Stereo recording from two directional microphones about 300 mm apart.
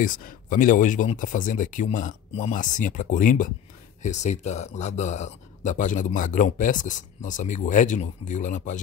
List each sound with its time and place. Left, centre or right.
0.0 s speech: left